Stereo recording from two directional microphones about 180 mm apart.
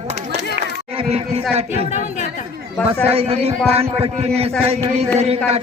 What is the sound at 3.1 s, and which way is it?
A man's voice, 35° right (ahead or behind).